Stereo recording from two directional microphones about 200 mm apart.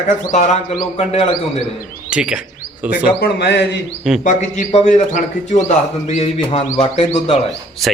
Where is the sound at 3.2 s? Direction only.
55° left (ahead or behind).